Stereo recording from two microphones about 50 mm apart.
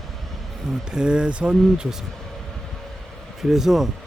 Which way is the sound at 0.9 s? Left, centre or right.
Centre.